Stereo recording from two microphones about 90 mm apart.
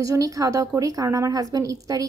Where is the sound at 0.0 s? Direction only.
40° right (ahead or behind).